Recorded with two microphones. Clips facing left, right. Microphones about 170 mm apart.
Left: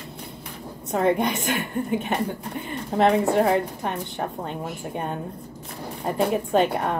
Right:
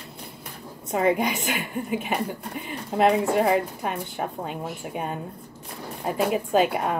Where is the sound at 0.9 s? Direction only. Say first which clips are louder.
Left 1 dB; 5° right (ahead or behind).